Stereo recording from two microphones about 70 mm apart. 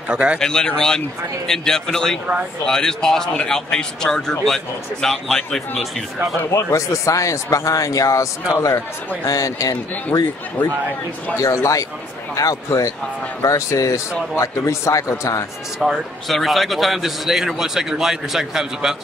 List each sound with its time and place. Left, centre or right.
0.1 s speech: centre
0.4 s a man's voice: centre
6.5 s speech: left
10.6 s speech: left
11.3 s speech: left
15.8 s a man's voice: centre